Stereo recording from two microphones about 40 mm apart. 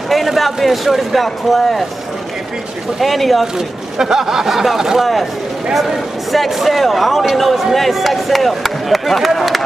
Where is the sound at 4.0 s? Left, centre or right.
Centre.